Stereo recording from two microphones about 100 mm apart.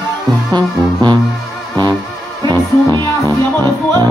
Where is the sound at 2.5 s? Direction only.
30° left (ahead or behind).